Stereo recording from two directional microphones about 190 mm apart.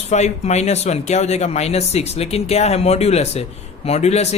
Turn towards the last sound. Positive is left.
turn(degrees=35)  # may be behind; listen again after turning